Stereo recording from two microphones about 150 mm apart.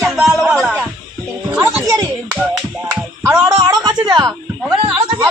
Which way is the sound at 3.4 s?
25° right (ahead or behind).